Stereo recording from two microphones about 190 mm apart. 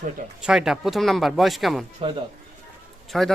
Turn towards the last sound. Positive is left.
turn(degrees=0)  # may be behind; listen again after turning